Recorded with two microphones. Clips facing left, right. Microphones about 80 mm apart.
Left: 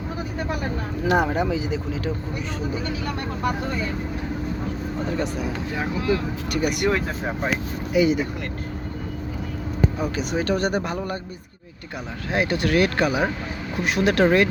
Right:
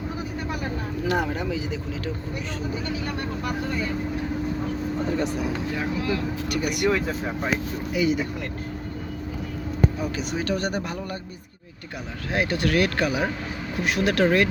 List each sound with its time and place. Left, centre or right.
1.0 s speech: centre
5.3 s speech: centre
6.5 s speech: centre
6.9 s speech: left
10.0 s a man's voice: left
12.3 s speech: centre
13.8 s speech: centre